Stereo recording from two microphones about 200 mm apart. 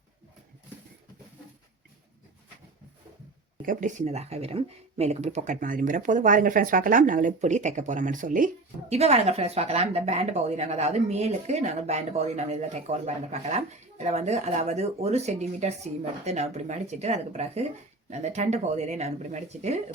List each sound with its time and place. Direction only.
3.7 s speech: 40° right (ahead or behind)